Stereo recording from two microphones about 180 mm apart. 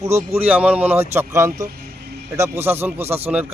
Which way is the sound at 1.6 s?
60° right (ahead or behind).